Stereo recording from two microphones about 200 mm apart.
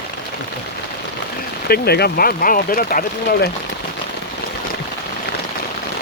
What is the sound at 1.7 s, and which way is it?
Speech, 50° left (ahead or behind).